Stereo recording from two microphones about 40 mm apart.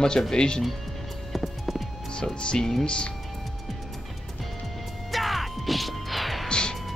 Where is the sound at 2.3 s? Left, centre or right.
Left.